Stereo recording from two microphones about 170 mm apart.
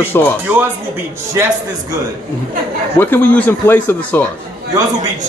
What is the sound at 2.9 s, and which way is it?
A man's voice, 10° left (ahead or behind).